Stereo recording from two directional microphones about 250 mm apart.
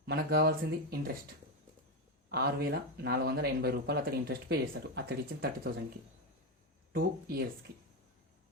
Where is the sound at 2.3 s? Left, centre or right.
Right.